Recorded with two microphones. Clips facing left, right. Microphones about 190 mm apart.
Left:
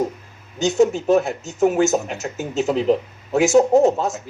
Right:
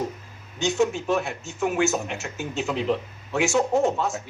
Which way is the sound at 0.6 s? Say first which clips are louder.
Left 6 dB; 40° left (ahead or behind).